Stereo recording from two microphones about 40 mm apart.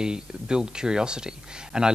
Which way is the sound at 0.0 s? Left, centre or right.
Centre.